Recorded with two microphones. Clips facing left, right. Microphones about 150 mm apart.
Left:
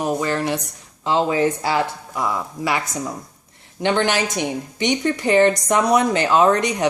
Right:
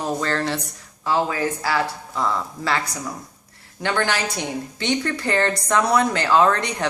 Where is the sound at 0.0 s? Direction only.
15° left (ahead or behind).